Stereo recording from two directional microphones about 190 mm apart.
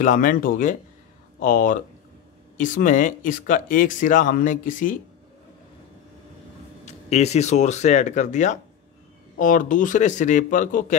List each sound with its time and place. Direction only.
0.0 s speech: 45° left (ahead or behind)
6.9 s speech: 35° left (ahead or behind)